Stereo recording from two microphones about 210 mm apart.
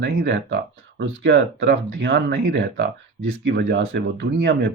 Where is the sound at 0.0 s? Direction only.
55° right (ahead or behind).